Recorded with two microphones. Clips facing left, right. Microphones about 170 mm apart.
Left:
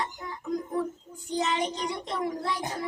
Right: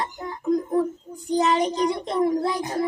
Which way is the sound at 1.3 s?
40° right (ahead or behind).